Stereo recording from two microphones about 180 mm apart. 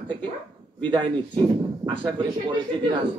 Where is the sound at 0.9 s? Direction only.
25° right (ahead or behind).